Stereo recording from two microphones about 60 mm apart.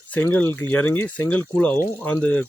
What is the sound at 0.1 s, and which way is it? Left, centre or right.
Speech, left.